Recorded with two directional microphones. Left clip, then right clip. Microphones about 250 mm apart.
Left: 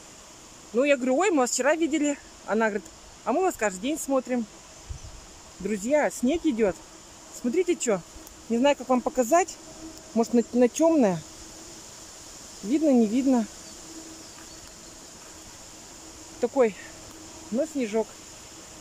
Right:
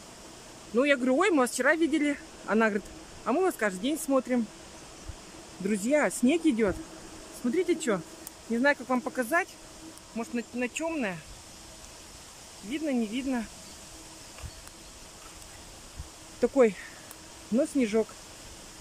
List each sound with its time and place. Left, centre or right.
0.7 s speech: centre
5.6 s speech: centre
12.7 s speech: centre
16.3 s speech: centre